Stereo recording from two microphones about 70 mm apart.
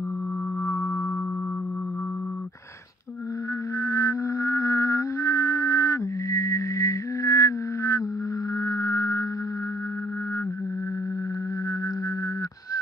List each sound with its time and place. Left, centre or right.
3.8 s music: left
8.5 s whale vocalization: left